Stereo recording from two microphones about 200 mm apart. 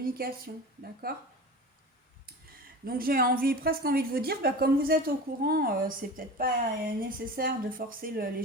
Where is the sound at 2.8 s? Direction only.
45° right (ahead or behind).